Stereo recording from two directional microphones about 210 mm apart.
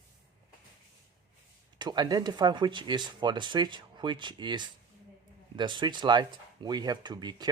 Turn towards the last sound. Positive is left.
turn(degrees=-20)  # may be behind; listen again after turning